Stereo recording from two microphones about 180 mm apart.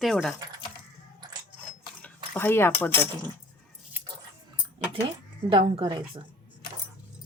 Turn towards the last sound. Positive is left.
turn(degrees=-25)  # may be behind; listen again after turning